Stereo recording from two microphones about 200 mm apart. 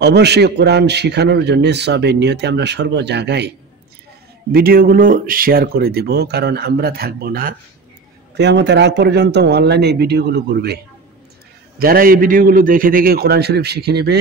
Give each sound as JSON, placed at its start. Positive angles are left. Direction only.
{"t": 0.0, "sound": "a man's voice", "side_deg": -55}
{"t": 8.4, "sound": "a man's voice", "side_deg": -60}
{"t": 11.8, "sound": "speech", "side_deg": -45}